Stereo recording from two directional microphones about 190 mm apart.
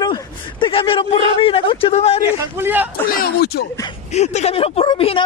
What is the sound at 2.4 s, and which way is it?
Speech, 10° right (ahead or behind).